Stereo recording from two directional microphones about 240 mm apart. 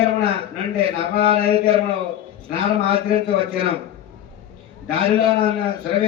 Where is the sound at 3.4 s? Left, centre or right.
Right.